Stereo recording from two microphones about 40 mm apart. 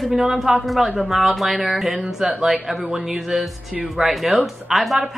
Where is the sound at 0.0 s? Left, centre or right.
Centre.